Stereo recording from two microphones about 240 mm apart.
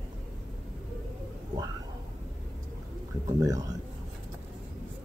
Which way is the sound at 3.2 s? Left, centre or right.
Centre.